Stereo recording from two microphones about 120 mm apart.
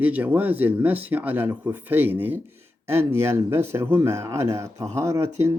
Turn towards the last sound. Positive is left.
turn(degrees=-25)  # may be behind; listen again after turning